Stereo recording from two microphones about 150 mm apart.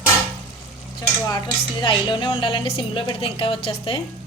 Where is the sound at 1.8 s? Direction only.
30° left (ahead or behind).